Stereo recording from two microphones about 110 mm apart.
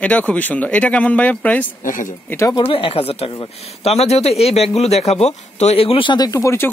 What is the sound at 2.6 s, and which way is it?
Speech, 60° left (ahead or behind).